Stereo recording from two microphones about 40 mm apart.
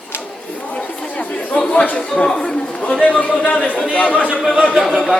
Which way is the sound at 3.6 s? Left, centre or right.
Left.